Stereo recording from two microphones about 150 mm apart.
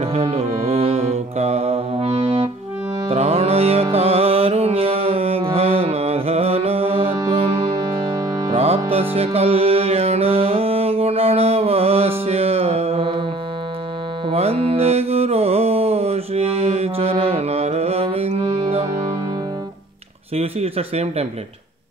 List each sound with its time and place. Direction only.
0.0 s music: 45° right (ahead or behind)
7.2 s music: 30° right (ahead or behind)
8.5 s music: 40° right (ahead or behind)
14.3 s music: 40° right (ahead or behind)
20.3 s speech: 40° right (ahead or behind)